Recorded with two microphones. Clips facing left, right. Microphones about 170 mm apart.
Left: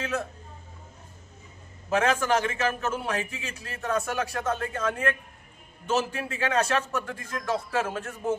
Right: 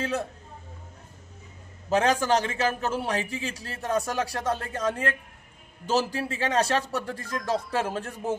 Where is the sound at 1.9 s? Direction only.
35° right (ahead or behind).